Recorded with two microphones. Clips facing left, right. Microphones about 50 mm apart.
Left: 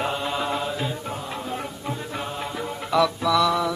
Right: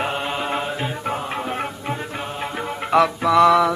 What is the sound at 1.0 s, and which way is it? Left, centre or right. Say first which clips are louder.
Music: right 6 dB; right.